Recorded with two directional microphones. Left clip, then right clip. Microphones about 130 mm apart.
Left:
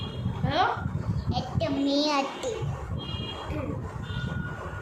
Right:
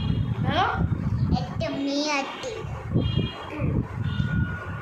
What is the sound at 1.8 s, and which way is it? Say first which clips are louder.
Speech: left 1 dB; 20° left (ahead or behind).